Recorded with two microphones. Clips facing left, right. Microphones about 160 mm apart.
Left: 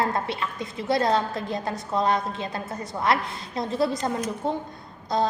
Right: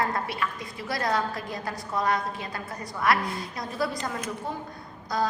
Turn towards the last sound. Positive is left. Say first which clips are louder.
# left 3 dB
turn(degrees=25)  # may be behind; listen again after turning